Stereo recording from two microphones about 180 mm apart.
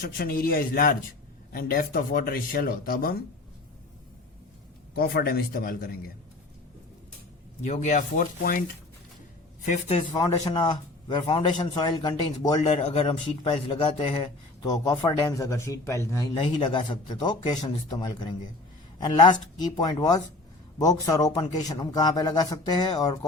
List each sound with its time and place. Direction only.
0.0 s a man's voice: 55° left (ahead or behind)
4.9 s a man's voice: 60° left (ahead or behind)
7.6 s speech: 40° left (ahead or behind)
9.6 s speech: 35° left (ahead or behind)
12.5 s speech: 35° left (ahead or behind)